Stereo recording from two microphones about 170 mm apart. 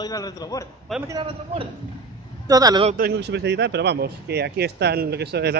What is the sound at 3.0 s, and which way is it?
Speech, 75° right (ahead or behind).